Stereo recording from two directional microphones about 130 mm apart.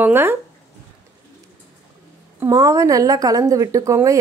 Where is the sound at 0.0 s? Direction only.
15° right (ahead or behind).